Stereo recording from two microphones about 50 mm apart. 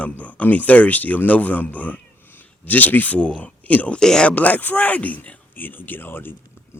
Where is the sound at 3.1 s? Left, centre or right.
Left.